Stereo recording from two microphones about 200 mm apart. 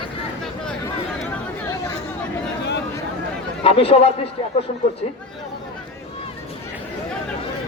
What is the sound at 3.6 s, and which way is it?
Speech, 30° left (ahead or behind).